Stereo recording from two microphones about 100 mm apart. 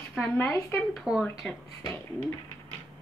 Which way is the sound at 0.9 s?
Centre (ahead or behind).